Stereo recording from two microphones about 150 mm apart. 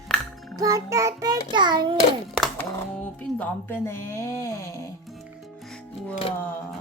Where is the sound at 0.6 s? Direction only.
20° right (ahead or behind).